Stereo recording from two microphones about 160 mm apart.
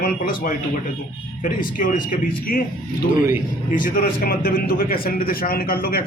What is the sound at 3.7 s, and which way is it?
A man's voice, 60° left (ahead or behind).